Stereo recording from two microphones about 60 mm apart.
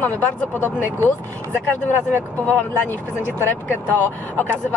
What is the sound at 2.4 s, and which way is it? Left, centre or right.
Speech, left.